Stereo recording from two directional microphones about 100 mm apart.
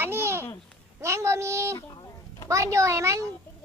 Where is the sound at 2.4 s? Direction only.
30° right (ahead or behind).